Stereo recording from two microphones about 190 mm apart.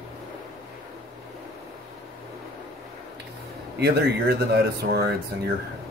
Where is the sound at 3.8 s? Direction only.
55° right (ahead or behind).